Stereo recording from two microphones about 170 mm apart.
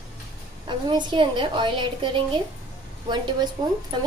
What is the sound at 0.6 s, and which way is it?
A woman's voice, 25° right (ahead or behind).